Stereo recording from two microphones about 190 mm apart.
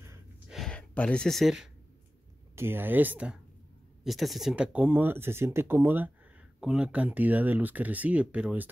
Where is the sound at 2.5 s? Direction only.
10° right (ahead or behind).